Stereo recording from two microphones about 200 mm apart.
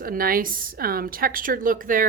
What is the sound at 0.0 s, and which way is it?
A woman's voice, 45° right (ahead or behind).